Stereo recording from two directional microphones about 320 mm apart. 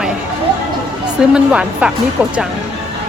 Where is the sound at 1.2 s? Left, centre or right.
Centre.